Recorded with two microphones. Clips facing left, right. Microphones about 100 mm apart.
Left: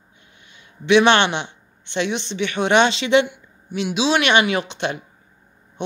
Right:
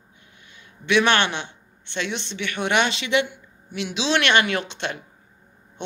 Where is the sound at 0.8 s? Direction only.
20° left (ahead or behind).